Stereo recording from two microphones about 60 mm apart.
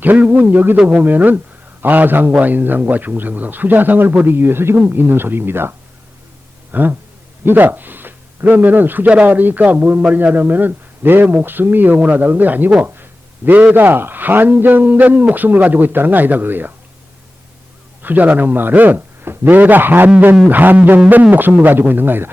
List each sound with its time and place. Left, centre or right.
0.0 s speech: right
0.8 s speech: centre
1.0 s a man's voice: right
18.0 s a man's voice: right